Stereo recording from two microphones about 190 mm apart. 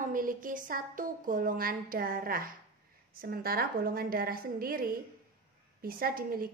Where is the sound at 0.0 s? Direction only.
45° right (ahead or behind).